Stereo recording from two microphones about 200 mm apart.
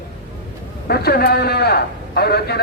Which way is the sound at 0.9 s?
50° left (ahead or behind).